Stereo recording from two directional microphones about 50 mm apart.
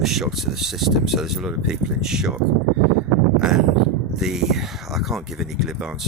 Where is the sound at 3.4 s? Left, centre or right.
Centre.